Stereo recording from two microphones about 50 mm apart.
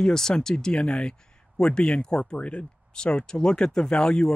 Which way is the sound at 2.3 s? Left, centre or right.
Left.